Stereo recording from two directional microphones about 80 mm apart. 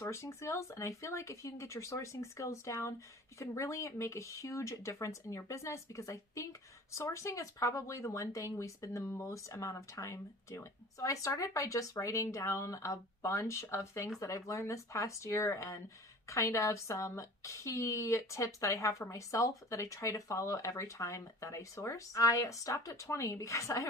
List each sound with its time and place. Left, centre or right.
0.0 s speech: left